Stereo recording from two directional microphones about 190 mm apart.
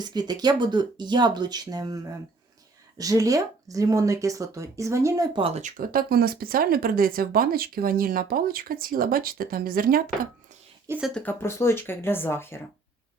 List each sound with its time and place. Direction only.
0.0 s speech: 20° right (ahead or behind)
3.0 s speech: 20° right (ahead or behind); by 10.0 s 50° right (ahead or behind)
10.8 s speech: 5° right (ahead or behind)
11.1 s speech: 10° left (ahead or behind)